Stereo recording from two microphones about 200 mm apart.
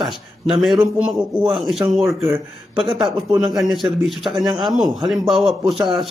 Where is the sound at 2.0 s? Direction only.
15° right (ahead or behind).